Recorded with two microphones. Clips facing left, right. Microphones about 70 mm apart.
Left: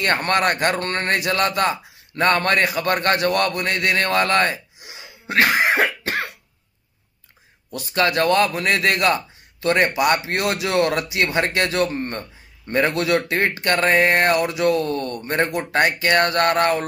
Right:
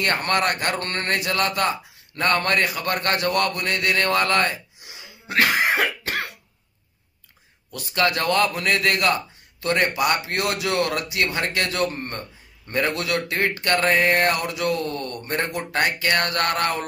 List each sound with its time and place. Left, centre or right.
0.0 s a man's voice: left
0.7 s mantra: centre
1.3 s a man's voice: left
4.4 s gasp: left
5.4 s a man's voice: left
5.8 s cough: left
7.7 s a man's voice: left
11.8 s mantra: centre
12.7 s a man's voice: left